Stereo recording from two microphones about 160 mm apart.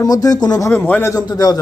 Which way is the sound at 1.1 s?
25° left (ahead or behind).